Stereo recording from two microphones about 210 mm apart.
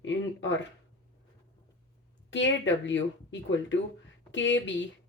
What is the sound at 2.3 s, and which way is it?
A woman's voice, 60° left (ahead or behind).